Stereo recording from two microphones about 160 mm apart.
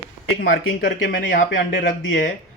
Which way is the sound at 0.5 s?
85° left.